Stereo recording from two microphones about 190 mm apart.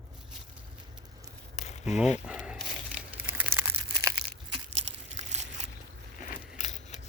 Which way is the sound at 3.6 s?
15° right (ahead or behind).